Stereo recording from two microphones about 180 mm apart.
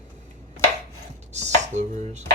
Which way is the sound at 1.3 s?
40° right (ahead or behind).